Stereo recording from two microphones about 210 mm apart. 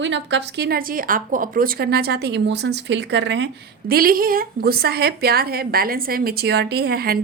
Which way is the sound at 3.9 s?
45° right (ahead or behind).